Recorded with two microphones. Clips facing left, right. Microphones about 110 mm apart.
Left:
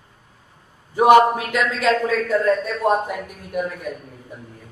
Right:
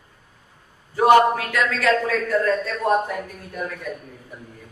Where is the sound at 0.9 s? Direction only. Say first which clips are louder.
Left 2 dB; 15° left (ahead or behind).